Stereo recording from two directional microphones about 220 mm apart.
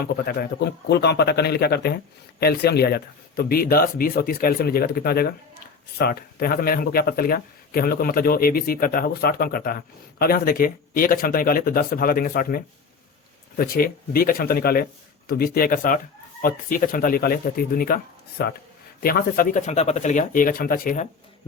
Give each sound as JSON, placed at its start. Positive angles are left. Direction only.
{"t": 0.0, "sound": "a man's voice", "side_deg": 45}